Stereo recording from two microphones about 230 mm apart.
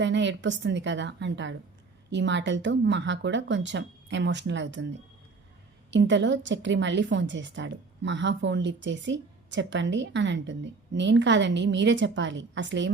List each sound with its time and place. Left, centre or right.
0.0 s a woman's voice: right
5.9 s a woman's voice: right